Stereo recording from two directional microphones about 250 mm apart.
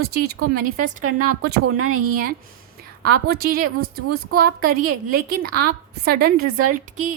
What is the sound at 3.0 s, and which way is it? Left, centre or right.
A woman's voice, right.